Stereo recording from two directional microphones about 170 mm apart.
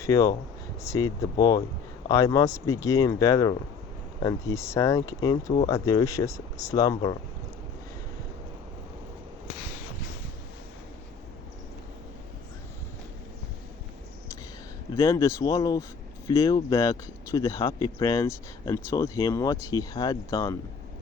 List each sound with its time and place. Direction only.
0.0 s speech: 20° left (ahead or behind)
14.9 s speech: 20° left (ahead or behind)